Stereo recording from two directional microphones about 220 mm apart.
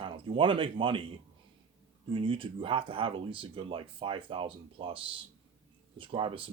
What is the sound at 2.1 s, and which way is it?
Speech, 25° right (ahead or behind).